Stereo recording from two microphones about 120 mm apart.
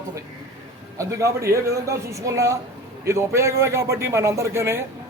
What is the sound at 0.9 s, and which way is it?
A man's voice, 25° right (ahead or behind).